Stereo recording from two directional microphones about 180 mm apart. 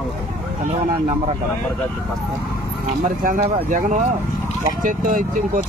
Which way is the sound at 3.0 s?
45° right (ahead or behind).